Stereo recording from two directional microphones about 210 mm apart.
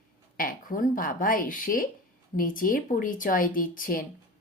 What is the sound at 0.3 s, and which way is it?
A woman's voice, 40° left (ahead or behind).